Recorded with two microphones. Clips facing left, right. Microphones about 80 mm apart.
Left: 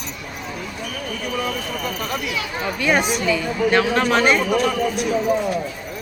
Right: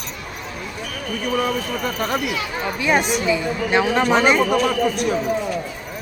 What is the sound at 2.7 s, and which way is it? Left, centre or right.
Speech, centre.